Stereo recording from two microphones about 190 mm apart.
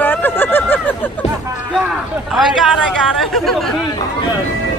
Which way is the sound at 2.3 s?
Centre (ahead or behind).